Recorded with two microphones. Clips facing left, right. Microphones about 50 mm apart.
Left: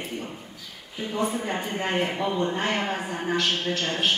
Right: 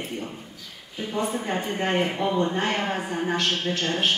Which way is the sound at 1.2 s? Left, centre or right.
Centre.